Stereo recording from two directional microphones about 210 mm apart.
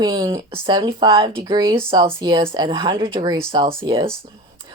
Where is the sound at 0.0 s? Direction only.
20° right (ahead or behind).